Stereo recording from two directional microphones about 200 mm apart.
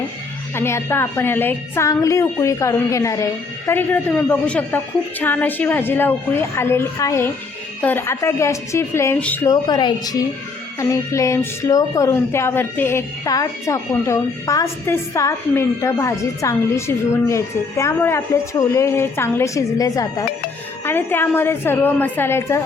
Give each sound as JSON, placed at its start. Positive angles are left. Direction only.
{"t": 0.5, "sound": "speech", "side_deg": 10}